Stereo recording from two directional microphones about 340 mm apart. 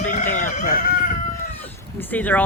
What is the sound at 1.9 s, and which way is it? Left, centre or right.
Speech, centre.